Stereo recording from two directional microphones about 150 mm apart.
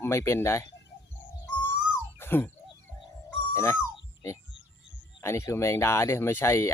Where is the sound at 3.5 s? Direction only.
15° left (ahead or behind).